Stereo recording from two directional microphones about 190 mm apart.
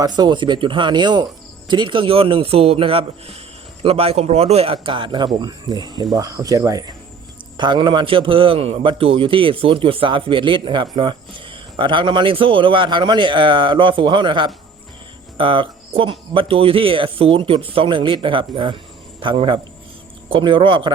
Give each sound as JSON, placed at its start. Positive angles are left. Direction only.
{"t": 0.0, "sound": "speech", "side_deg": -20}